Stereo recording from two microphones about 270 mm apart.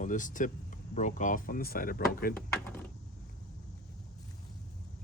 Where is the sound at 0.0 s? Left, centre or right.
Left.